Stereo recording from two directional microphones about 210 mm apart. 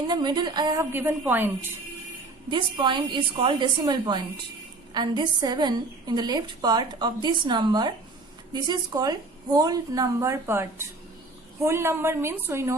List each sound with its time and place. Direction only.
0.1 s a woman's voice: 20° right (ahead or behind)
2.5 s a woman's voice: 20° right (ahead or behind)